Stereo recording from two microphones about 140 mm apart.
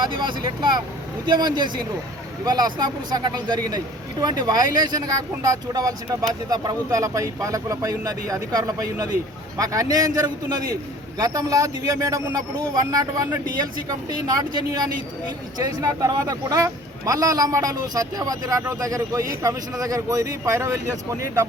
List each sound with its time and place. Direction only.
0.0 s speech: 35° right (ahead or behind)